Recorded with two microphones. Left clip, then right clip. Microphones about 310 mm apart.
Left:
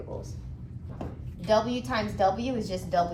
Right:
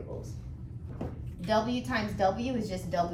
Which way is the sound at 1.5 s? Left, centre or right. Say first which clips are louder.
Left 4 dB; centre.